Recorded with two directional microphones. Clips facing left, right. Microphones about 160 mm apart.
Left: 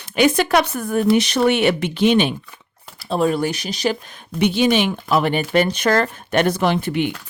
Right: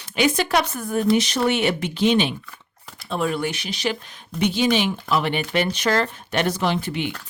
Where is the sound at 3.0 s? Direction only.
35° left (ahead or behind).